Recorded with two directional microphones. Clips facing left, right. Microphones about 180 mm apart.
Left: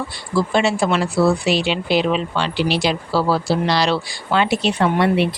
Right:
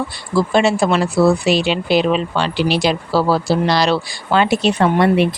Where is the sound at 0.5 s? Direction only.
45° right (ahead or behind).